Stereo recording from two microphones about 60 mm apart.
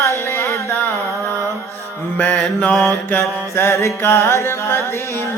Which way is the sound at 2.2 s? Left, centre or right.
Left.